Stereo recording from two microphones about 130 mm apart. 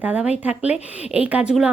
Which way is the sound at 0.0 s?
10° right (ahead or behind).